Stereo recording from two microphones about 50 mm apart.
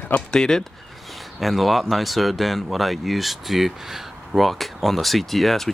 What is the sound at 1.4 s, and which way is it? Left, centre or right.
Speech, centre.